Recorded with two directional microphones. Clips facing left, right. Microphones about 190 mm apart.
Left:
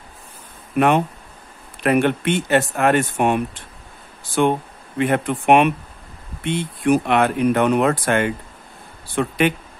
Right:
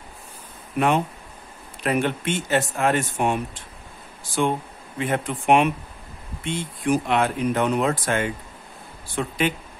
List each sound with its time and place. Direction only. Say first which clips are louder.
0.7 s speech: left 4 dB; 60° left (ahead or behind)